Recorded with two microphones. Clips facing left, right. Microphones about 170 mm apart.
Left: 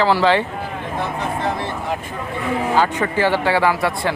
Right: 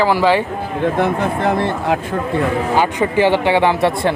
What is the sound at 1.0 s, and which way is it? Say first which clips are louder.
Speech: right 3 dB; 60° right (ahead or behind).